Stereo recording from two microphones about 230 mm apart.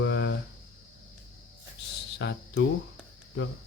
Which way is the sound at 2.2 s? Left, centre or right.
Left.